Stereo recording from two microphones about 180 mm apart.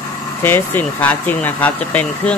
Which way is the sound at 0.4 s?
10° left (ahead or behind).